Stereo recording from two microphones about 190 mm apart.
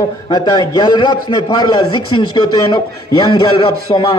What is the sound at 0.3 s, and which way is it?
A man's voice, 20° left (ahead or behind).